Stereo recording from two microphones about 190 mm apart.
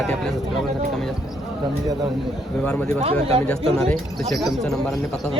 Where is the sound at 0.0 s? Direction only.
Centre (ahead or behind).